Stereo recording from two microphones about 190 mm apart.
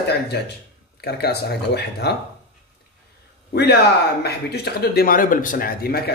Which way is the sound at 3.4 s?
55° left (ahead or behind).